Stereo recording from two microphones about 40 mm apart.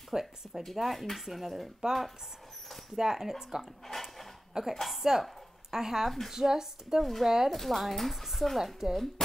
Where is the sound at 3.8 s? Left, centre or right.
Centre.